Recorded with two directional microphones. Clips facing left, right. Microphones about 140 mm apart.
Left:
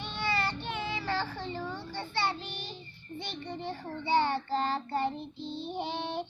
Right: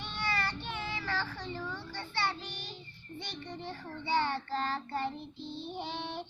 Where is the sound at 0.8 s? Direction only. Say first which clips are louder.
Left 4 dB; 15° left (ahead or behind).